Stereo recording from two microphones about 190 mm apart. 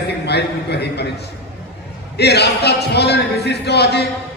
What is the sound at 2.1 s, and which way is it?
A man's voice, 60° left (ahead or behind).